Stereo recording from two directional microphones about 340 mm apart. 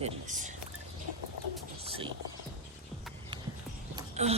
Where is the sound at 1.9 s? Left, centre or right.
Centre.